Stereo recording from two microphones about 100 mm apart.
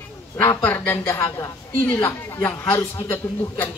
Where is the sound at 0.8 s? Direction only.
30° left (ahead or behind).